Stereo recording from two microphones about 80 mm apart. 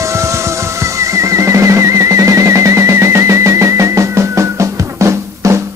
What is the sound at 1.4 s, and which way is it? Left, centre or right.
Music, right.